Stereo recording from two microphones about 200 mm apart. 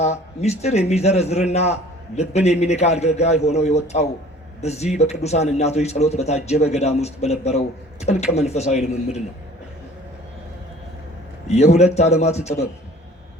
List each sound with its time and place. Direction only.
0.0 s a man's voice: 35° left (ahead or behind)
11.4 s a man's voice: 35° left (ahead or behind)